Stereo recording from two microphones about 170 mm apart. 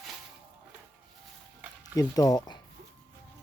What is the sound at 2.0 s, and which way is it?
Speech, 20° left (ahead or behind).